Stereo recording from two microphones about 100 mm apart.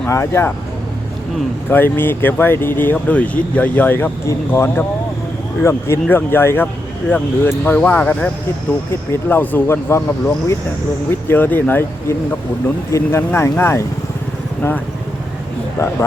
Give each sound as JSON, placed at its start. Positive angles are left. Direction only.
{"t": 0.1, "sound": "speech", "side_deg": 30}
{"t": 1.7, "sound": "speech", "side_deg": 20}
{"t": 11.3, "sound": "speech", "side_deg": 20}
{"t": 15.8, "sound": "speech", "side_deg": 30}